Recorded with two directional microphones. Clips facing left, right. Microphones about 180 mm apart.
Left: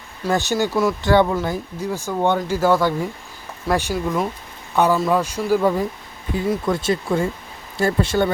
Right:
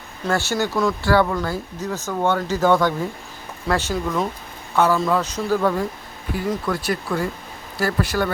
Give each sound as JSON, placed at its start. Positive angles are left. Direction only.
{"t": 0.3, "sound": "a man's voice", "side_deg": 15}
{"t": 6.7, "sound": "speech", "side_deg": 25}